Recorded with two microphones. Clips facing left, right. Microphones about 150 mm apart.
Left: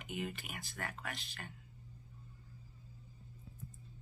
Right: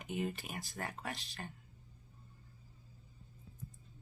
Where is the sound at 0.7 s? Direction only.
20° right (ahead or behind).